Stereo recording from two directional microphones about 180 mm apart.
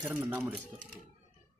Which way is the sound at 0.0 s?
10° right (ahead or behind).